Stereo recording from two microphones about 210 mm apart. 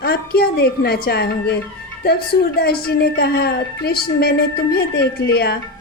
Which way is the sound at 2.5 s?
45° left (ahead or behind).